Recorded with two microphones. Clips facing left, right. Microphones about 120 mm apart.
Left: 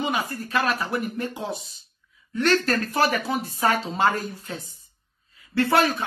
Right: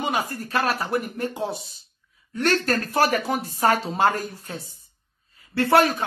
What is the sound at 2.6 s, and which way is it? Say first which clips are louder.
A man's voice: right 1 dB; 45° right (ahead or behind).